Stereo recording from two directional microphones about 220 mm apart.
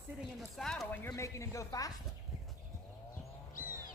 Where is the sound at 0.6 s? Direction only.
Centre (ahead or behind).